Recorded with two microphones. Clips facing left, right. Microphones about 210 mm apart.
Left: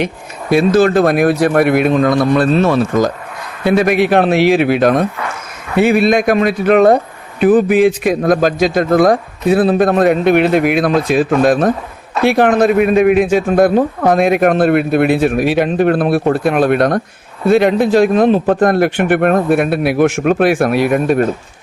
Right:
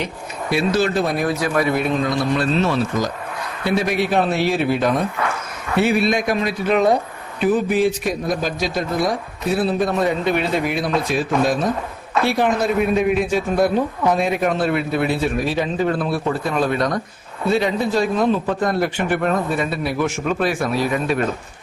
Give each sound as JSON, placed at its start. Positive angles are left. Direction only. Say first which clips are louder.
{"t": 0.5, "sound": "speech", "louder": "left 8 dB", "side_deg": 50}
{"t": 1.0, "sound": "a man's voice", "louder": "left 9 dB", "side_deg": 75}
{"t": 4.1, "sound": "speech", "louder": "left 7 dB", "side_deg": 85}
{"t": 6.1, "sound": "a man's voice", "louder": "left 8 dB", "side_deg": 60}
{"t": 7.9, "sound": "speech", "louder": "left 8 dB", "side_deg": 90}
{"t": 9.7, "sound": "a man's voice", "louder": "left 8 dB", "side_deg": 80}
{"t": 12.4, "sound": "a man's voice", "louder": "left 9 dB", "side_deg": 85}
{"t": 14.1, "sound": "a man's voice", "louder": "left 8 dB", "side_deg": 70}